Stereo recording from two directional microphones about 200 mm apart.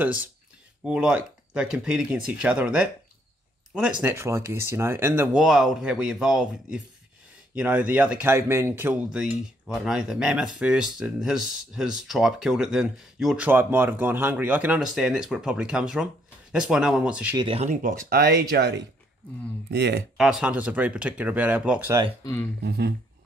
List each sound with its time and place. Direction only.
0.0 s speech: 5° right (ahead or behind)
4.0 s speech: 10° right (ahead or behind)
17.4 s speech: 30° right (ahead or behind)
18.1 s speech: 50° right (ahead or behind)
20.2 s speech: 5° right (ahead or behind)
22.2 s speech: 15° left (ahead or behind)
22.6 s speech: 55° right (ahead or behind)